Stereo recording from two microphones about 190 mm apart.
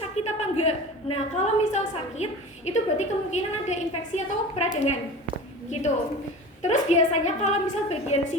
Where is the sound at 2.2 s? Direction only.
35° left (ahead or behind).